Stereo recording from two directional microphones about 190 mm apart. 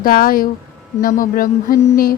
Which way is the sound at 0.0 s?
50° left (ahead or behind).